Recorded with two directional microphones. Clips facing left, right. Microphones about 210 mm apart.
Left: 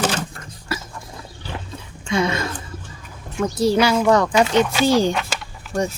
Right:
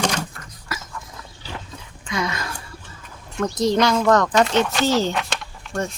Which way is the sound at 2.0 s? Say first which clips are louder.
Left 5 dB; 25° left (ahead or behind).